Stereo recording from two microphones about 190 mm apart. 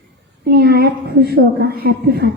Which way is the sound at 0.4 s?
55° right (ahead or behind).